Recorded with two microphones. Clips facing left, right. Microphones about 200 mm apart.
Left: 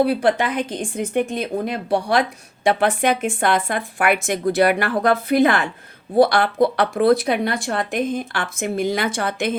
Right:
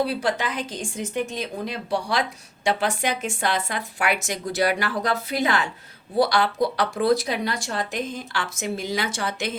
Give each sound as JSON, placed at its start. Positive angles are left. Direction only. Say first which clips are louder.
{"t": 0.0, "sound": "speech", "louder": "left 7 dB", "side_deg": 55}